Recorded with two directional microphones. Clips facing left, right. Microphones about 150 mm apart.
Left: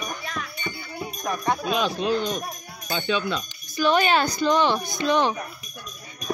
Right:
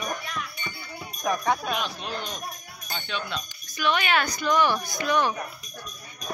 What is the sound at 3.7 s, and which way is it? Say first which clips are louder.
Speech: left 5 dB; 35° left (ahead or behind).